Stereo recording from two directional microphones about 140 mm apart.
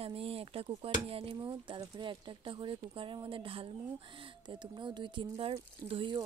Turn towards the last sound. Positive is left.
turn(degrees=-40)  # may be behind; listen again after turning